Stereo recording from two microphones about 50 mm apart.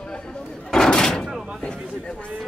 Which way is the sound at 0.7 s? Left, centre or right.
Centre.